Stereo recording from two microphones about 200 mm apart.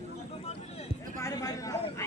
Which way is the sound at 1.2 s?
15° left (ahead or behind).